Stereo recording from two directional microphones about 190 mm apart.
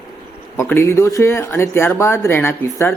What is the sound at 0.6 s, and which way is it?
Speech, 15° left (ahead or behind).